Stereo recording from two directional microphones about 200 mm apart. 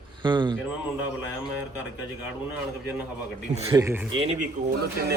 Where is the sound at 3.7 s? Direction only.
15° right (ahead or behind).